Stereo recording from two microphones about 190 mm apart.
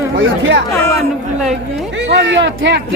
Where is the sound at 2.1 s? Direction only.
70° right (ahead or behind).